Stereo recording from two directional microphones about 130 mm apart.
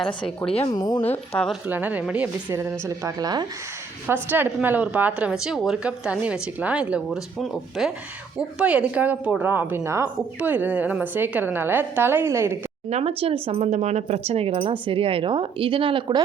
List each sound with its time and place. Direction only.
0.7 s speech: 30° left (ahead or behind)
1.6 s speech: 15° right (ahead or behind); by 3.4 s 30° right (ahead or behind)
4.0 s speech: 15° right (ahead or behind)
12.9 s speech: 50° right (ahead or behind)